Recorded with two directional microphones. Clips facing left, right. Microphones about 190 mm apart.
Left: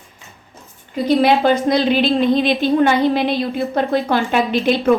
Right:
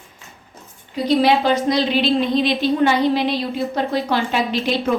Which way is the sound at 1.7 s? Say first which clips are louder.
Left 2 dB; 50° left (ahead or behind).